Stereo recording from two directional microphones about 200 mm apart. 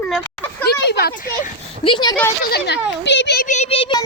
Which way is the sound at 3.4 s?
35° left (ahead or behind).